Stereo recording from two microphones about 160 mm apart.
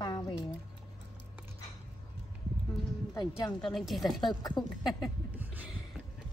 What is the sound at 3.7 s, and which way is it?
Speech, centre (ahead or behind).